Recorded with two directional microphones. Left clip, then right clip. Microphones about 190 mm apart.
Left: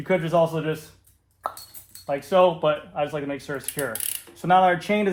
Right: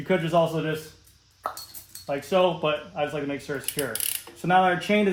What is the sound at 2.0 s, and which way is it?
A man's voice, 20° left (ahead or behind).